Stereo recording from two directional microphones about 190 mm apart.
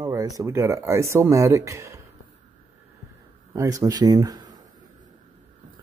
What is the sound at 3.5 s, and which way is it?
Speech, 15° right (ahead or behind).